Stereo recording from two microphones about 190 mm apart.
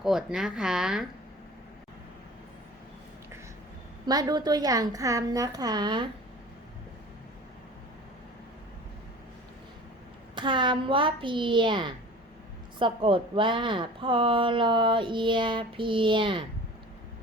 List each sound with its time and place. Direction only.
0.0 s a woman's voice: 5° right (ahead or behind)
4.0 s speech: 20° right (ahead or behind)
10.3 s speech: 25° right (ahead or behind)